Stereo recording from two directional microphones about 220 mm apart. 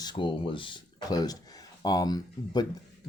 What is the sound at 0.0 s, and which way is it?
Speech, 20° left (ahead or behind).